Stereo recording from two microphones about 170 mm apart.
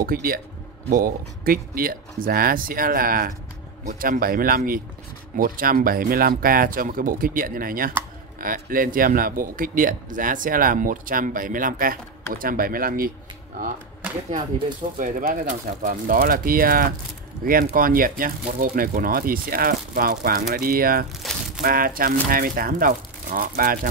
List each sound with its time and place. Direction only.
0.0 s speech: 60° right (ahead or behind)
15.0 s speech: 55° right (ahead or behind)